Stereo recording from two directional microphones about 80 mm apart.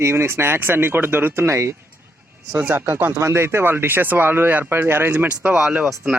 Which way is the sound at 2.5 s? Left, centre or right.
Centre.